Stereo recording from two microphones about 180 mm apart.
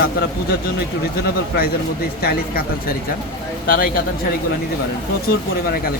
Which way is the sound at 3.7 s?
50° left (ahead or behind).